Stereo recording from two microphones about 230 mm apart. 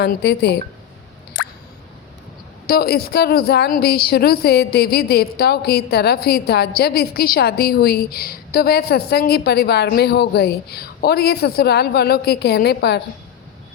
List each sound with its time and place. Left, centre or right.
0.0 s a woman's voice: left
1.4 s plop: left
2.6 s a woman's voice: left